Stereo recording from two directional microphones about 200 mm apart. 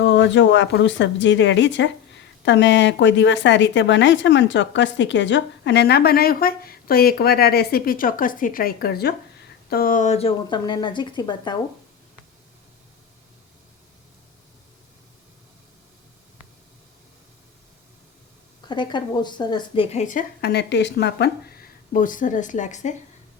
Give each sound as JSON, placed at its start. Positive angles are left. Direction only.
{"t": 0.0, "sound": "speech", "side_deg": 65}
{"t": 18.7, "sound": "a woman's voice", "side_deg": 20}
{"t": 21.9, "sound": "a woman's voice", "side_deg": 40}